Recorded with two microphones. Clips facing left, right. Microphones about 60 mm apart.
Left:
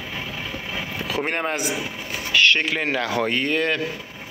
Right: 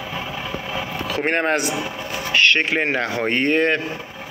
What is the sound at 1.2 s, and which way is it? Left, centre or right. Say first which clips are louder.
Speech: right 8 dB; right.